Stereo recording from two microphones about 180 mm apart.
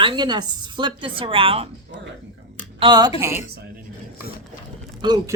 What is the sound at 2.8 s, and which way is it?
Speech, 20° right (ahead or behind).